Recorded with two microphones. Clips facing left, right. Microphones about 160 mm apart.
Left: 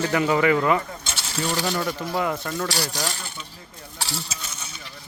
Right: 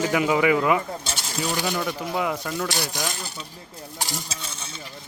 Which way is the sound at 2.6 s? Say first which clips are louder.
Left 1 dB; 20° right (ahead or behind).